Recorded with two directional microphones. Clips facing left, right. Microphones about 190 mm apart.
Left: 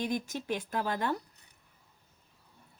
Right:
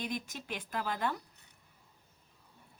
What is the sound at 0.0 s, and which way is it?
Speech, 45° left (ahead or behind).